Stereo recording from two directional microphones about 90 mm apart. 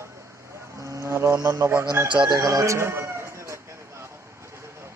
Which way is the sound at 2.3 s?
40° right (ahead or behind).